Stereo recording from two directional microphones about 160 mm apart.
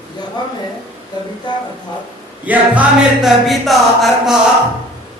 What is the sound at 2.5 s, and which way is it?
Chant, 10° right (ahead or behind).